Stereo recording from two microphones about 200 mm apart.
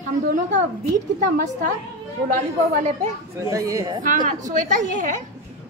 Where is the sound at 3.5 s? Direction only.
15° right (ahead or behind).